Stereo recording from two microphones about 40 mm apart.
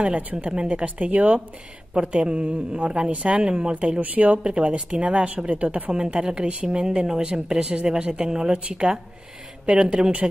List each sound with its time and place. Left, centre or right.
0.3 s speech: centre
0.7 s speech: right
3.7 s speech: right
4.4 s speech: right
5.9 s speech: right